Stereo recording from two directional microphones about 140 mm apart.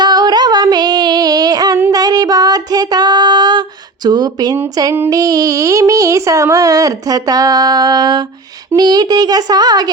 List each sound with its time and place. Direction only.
0.0 s female singing: 30° right (ahead or behind)